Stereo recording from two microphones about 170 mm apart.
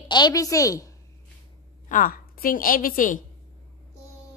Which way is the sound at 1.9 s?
55° left (ahead or behind).